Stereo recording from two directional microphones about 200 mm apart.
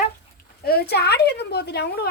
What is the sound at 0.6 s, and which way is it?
Speech, 50° left (ahead or behind).